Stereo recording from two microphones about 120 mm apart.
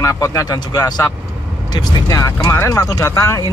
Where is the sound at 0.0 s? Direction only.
25° left (ahead or behind).